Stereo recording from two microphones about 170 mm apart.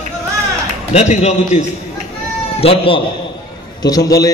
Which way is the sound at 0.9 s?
40° left (ahead or behind).